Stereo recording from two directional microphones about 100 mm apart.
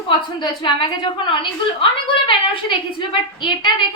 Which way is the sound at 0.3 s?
50° left (ahead or behind).